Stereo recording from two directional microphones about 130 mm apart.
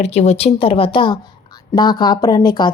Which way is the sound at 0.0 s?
60° left (ahead or behind).